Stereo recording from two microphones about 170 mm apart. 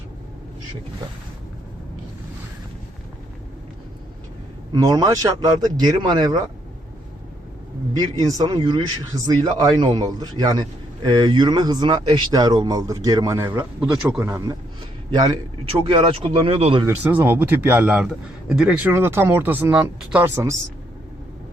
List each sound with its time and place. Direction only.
4.7 s speech: 20° right (ahead or behind)
7.9 s speech: 20° right (ahead or behind)
13.9 s a man's voice: 5° right (ahead or behind)
14.2 s a man's voice: 20° right (ahead or behind); by 16.8 s 35° right (ahead or behind)
16.8 s a man's voice: 10° right (ahead or behind)